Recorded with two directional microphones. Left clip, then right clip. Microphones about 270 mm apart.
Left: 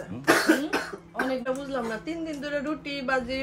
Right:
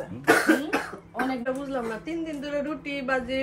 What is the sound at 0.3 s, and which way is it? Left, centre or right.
Cough, centre.